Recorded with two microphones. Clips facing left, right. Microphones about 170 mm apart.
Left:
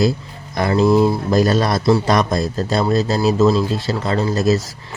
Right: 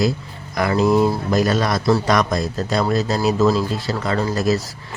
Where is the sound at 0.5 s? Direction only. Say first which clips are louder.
Left 2 dB; 30° left (ahead or behind).